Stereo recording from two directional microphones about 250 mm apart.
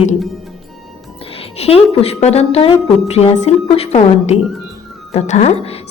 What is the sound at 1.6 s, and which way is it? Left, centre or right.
A woman's voice, left.